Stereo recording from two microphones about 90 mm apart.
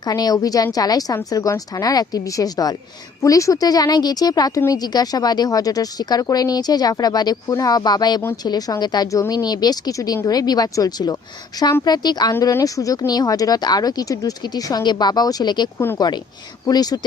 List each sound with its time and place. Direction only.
0.0 s speech: 45° left (ahead or behind)
9.0 s speech: 40° left (ahead or behind)
12.4 s speech: 40° left (ahead or behind)